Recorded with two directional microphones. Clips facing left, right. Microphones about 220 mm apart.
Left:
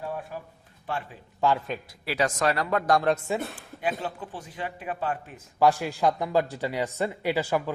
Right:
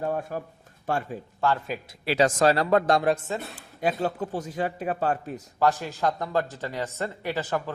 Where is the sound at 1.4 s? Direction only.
15° left (ahead or behind).